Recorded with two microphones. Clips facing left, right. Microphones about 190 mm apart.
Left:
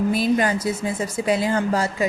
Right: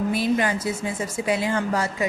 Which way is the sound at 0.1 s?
40° left (ahead or behind).